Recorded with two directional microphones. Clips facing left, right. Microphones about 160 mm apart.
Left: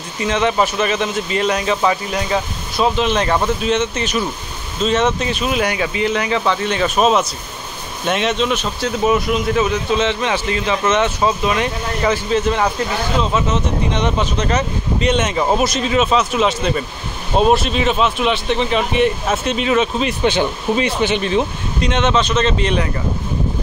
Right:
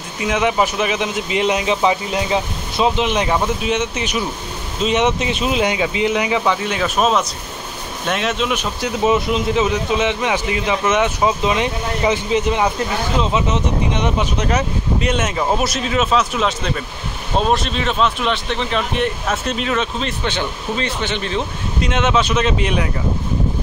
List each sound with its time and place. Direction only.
0.2 s speech: 10° right (ahead or behind); by 21.5 s 15° left (ahead or behind)
21.8 s speech: 5° right (ahead or behind)